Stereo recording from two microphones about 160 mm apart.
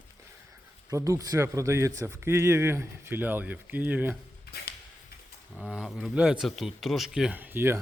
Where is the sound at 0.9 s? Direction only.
20° right (ahead or behind).